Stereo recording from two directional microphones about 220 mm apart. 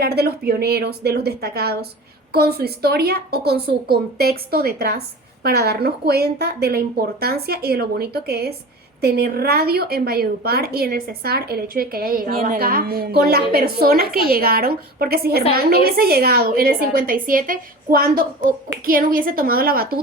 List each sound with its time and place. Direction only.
0.0 s a woman's voice: 45° right (ahead or behind)